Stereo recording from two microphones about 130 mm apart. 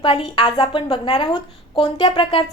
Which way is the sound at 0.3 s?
40° left (ahead or behind).